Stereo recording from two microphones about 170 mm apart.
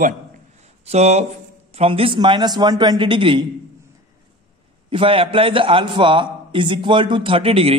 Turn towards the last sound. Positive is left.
turn(degrees=-35)  # may be behind; listen again after turning